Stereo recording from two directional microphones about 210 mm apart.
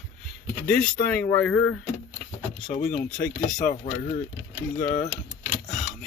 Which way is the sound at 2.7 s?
35° left (ahead or behind).